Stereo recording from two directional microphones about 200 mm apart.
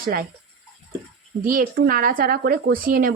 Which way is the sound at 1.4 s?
45° right (ahead or behind).